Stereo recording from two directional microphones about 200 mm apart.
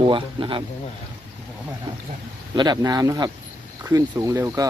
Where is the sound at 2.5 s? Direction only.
20° right (ahead or behind).